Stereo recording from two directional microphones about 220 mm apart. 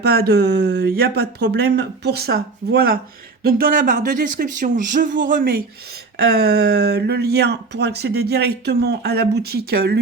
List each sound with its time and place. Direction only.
0.0 s speech: 45° right (ahead or behind)